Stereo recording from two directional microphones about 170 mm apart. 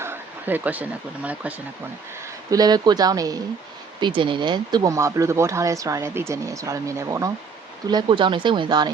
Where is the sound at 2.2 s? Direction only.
20° right (ahead or behind).